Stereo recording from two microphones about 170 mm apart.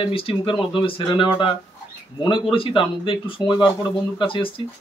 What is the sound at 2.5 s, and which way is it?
Speech, 30° left (ahead or behind).